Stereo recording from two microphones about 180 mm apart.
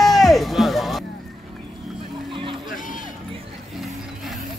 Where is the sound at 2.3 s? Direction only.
30° right (ahead or behind).